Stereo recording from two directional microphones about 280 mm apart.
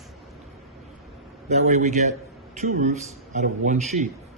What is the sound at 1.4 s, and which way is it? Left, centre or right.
A man's voice, right.